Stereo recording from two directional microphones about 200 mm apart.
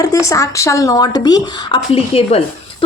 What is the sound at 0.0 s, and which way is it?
Speech, 15° left (ahead or behind).